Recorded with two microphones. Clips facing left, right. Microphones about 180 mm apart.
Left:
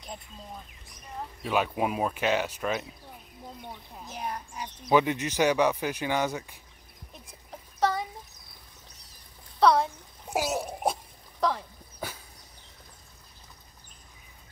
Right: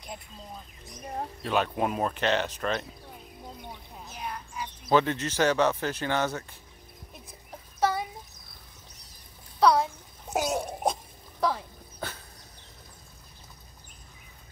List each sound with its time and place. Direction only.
0.8 s speech: 45° right (ahead or behind)
1.4 s speech: 5° left (ahead or behind)
4.1 s speech: 45° left (ahead or behind)
4.8 s speech: 15° left (ahead or behind)
7.8 s chicken: 10° right (ahead or behind)
9.6 s a sound: centre (ahead or behind)
11.3 s a sound: 5° right (ahead or behind)
12.0 s dog: 10° left (ahead or behind)